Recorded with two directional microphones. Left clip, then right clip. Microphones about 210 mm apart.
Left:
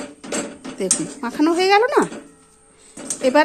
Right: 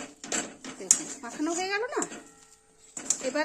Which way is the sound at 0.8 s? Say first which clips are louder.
Left 6 dB; 40° left (ahead or behind).